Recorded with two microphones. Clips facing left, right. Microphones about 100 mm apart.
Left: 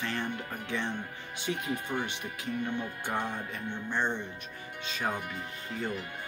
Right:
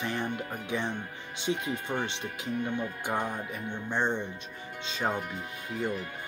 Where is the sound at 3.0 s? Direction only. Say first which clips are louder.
Right 2 dB; 15° right (ahead or behind).